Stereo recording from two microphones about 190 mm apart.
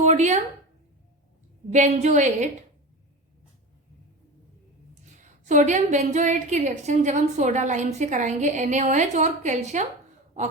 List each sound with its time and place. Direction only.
0.0 s a sound: 40° right (ahead or behind)
1.7 s a woman's voice: 35° right (ahead or behind)
5.5 s a woman's voice: 40° right (ahead or behind)